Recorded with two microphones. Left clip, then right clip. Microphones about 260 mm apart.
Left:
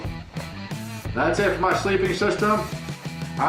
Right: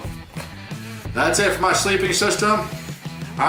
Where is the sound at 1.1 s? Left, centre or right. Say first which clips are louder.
Right 3 dB; centre.